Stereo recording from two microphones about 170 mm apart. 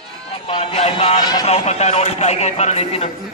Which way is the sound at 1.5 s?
40° left (ahead or behind).